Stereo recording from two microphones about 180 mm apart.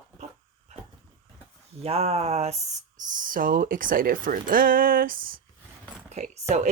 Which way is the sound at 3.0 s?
45° right (ahead or behind).